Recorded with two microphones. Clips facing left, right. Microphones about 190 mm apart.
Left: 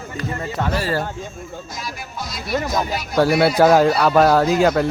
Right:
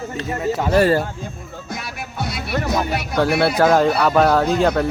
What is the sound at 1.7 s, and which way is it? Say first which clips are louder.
Music: right 6 dB; 65° right (ahead or behind).